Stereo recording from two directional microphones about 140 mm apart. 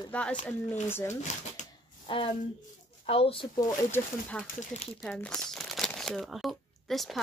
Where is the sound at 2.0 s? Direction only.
40° left (ahead or behind).